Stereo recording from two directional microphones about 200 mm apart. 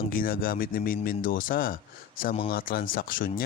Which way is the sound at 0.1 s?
45° left (ahead or behind).